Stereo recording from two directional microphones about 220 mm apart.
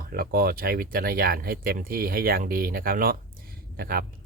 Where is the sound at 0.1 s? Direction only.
45° right (ahead or behind).